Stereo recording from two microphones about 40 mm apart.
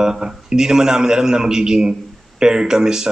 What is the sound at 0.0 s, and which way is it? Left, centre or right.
A man's voice, centre.